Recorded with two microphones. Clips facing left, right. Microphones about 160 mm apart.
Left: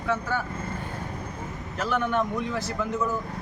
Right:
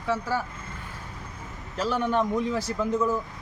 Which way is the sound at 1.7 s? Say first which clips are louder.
Right 1 dB; 35° right (ahead or behind).